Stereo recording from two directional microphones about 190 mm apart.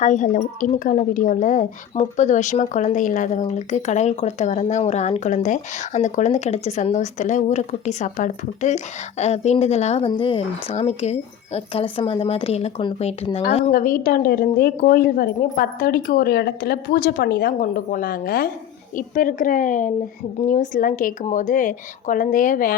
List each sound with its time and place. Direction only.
0.0 s a woman's voice: 40° left (ahead or behind)
13.7 s a woman's voice: 45° left (ahead or behind)